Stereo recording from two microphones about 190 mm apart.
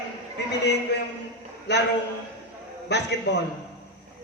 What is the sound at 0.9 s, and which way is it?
Speech, 65° left (ahead or behind).